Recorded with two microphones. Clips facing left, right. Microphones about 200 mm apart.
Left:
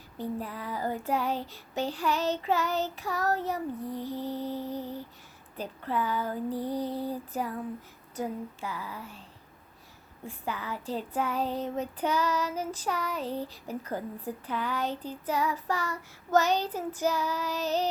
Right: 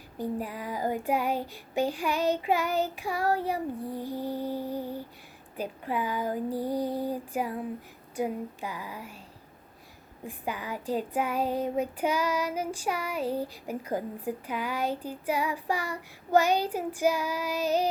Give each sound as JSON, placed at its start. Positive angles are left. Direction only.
{"t": 0.2, "sound": "child singing", "side_deg": -10}
{"t": 10.2, "sound": "child singing", "side_deg": -15}